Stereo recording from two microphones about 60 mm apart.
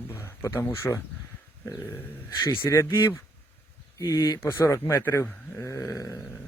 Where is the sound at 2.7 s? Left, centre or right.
Left.